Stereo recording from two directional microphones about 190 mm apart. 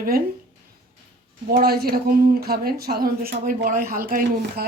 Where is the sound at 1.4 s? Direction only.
50° right (ahead or behind).